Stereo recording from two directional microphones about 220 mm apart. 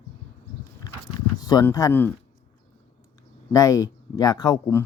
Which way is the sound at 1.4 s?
20° left (ahead or behind).